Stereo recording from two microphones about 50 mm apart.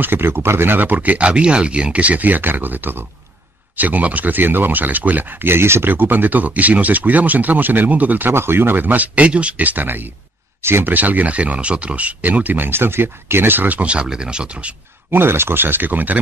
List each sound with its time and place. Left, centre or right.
0.0 s speech: right
0.7 s speech: right
5.5 s speech: right
5.9 s speech: right
8.3 s speech: right
10.6 s speech: right
10.9 s speech: right
13.8 s speech: centre
15.0 s speech: right